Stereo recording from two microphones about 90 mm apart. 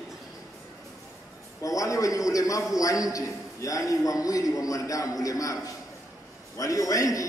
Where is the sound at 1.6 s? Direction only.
40° left (ahead or behind).